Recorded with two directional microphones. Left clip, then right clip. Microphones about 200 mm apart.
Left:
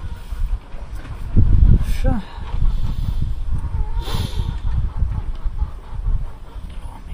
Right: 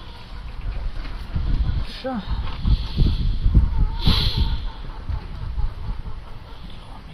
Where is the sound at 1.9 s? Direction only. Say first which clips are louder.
Right 3 dB; 15° left (ahead or behind).